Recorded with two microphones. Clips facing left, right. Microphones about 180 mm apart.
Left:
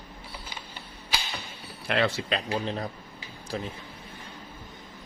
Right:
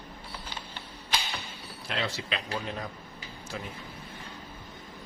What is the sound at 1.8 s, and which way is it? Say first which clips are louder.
Speech: left 8 dB; 65° left (ahead or behind).